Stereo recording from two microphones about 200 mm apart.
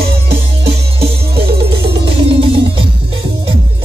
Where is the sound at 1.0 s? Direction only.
50° right (ahead or behind).